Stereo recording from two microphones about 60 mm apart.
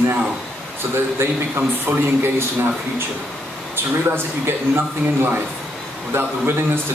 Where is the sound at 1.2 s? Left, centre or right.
Right.